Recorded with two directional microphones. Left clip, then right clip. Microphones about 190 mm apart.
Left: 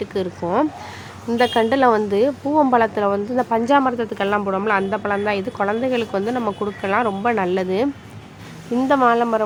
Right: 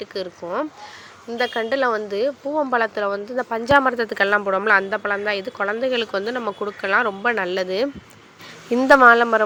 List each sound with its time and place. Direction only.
0.0 s a woman's voice: 15° right (ahead or behind)
9.0 s a woman's voice: 25° right (ahead or behind)